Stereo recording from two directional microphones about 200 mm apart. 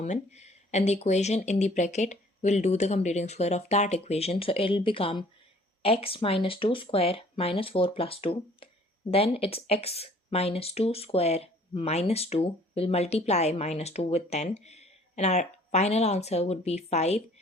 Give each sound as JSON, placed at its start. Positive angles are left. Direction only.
{"t": 0.0, "sound": "speech", "side_deg": 35}